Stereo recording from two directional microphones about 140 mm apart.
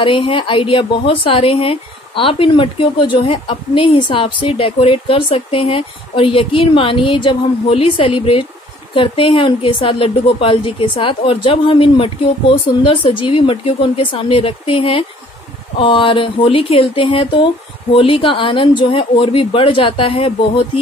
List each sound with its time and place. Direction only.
0.0 s a woman's voice: 40° left (ahead or behind)